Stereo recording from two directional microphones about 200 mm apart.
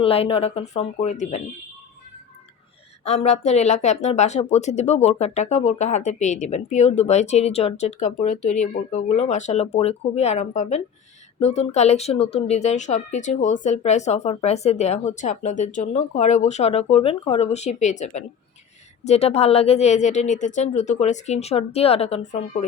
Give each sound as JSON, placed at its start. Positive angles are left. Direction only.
{"t": 0.0, "sound": "speech", "side_deg": 30}
{"t": 3.0, "sound": "speech", "side_deg": 35}